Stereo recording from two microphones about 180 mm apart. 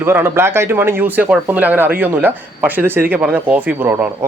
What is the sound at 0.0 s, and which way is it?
Speech, 15° right (ahead or behind).